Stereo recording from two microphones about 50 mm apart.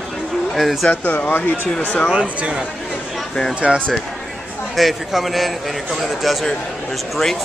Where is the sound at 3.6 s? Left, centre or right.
Centre.